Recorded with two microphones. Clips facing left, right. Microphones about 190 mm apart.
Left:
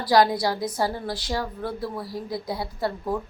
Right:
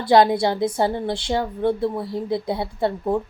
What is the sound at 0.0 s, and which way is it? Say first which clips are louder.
A woman's voice: right 4 dB; 25° right (ahead or behind).